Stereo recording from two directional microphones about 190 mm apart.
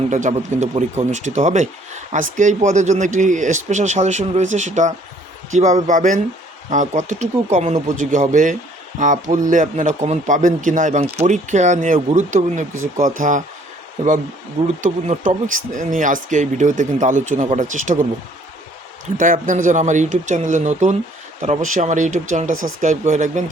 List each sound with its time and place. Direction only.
0.1 s speech: 40° right (ahead or behind)
14.8 s speech: 35° right (ahead or behind)
19.1 s speech: 45° right (ahead or behind)